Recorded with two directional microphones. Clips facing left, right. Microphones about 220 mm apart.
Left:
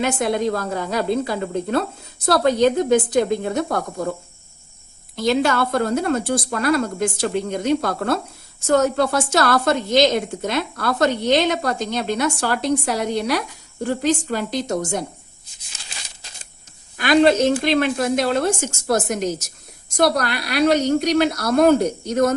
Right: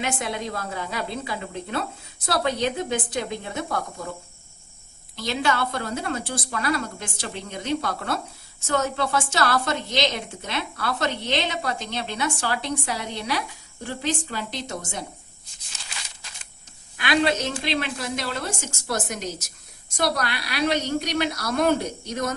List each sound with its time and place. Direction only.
0.0 s a woman's voice: 40° left (ahead or behind)
5.1 s a woman's voice: 45° left (ahead or behind)
17.0 s a woman's voice: 45° left (ahead or behind)